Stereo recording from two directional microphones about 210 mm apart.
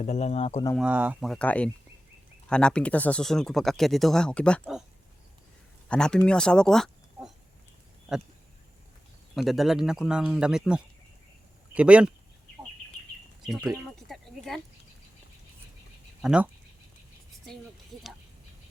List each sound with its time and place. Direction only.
0.0 s speech: 30° left (ahead or behind)
0.8 s speech: 5° right (ahead or behind)
5.9 s speech: 5° left (ahead or behind)
9.3 s speech: centre (ahead or behind)
13.4 s a sound: centre (ahead or behind)
16.2 s speech: 5° right (ahead or behind)